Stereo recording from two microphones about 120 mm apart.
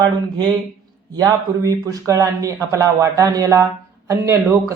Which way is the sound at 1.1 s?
30° right (ahead or behind).